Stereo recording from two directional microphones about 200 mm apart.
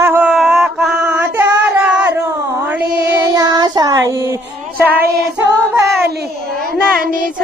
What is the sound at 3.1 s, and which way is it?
Child singing, 20° right (ahead or behind).